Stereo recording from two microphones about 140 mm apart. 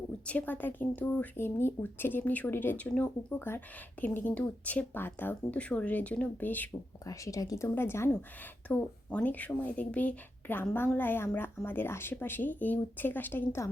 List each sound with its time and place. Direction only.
0.3 s speech: 10° left (ahead or behind)
7.0 s speech: 25° left (ahead or behind)